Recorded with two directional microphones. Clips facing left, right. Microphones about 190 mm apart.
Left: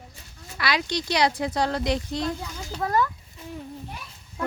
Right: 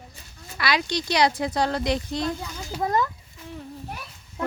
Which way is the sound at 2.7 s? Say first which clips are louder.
Even; 20° right (ahead or behind).